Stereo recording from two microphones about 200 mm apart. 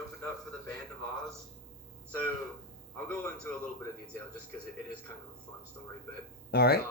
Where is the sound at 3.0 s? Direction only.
5° left (ahead or behind).